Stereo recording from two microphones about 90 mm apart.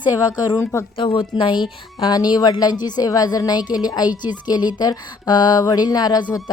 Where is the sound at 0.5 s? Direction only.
30° left (ahead or behind).